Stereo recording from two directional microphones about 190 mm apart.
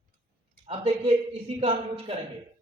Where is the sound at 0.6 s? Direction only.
30° right (ahead or behind).